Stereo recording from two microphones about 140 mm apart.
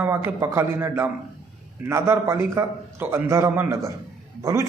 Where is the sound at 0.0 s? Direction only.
15° right (ahead or behind).